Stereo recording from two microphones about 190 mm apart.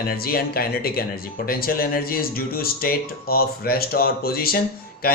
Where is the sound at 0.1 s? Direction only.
50° left (ahead or behind).